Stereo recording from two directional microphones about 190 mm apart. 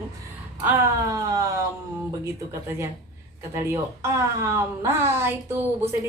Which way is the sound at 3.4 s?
15° right (ahead or behind).